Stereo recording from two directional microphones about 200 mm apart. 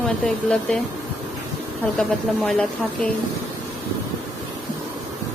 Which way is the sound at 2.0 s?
5° left (ahead or behind).